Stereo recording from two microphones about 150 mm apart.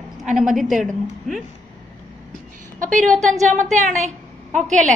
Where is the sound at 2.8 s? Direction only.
60° right (ahead or behind).